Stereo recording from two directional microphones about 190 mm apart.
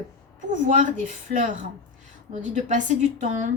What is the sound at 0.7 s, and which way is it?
A woman's voice, 40° right (ahead or behind).